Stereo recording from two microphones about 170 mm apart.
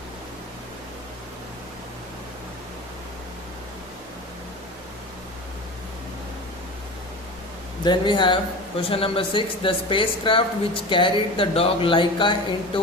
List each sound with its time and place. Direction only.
7.9 s speech: 25° left (ahead or behind)